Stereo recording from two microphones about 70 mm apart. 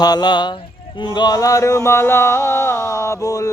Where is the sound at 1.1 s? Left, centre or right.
Left.